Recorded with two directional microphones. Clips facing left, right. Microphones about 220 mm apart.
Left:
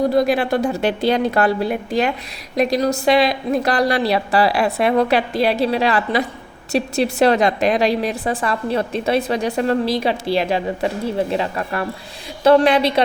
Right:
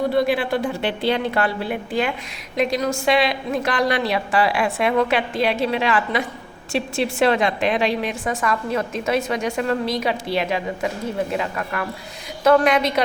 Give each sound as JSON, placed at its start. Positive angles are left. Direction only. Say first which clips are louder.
{"t": 0.1, "sound": "a woman's voice", "louder": "left 3 dB", "side_deg": 40}